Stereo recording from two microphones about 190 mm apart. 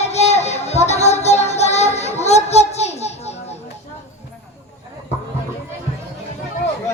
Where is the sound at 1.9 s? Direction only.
35° left (ahead or behind).